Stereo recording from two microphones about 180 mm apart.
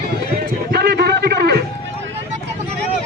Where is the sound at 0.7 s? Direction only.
65° right (ahead or behind).